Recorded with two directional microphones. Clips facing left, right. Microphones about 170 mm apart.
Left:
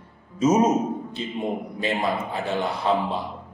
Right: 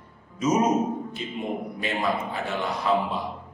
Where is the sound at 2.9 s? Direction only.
30° left (ahead or behind).